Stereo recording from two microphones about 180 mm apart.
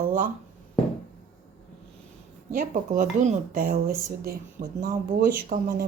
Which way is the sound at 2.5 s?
45° right (ahead or behind).